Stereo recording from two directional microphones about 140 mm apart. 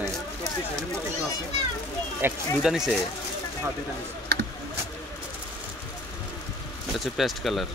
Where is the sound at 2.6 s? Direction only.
5° right (ahead or behind).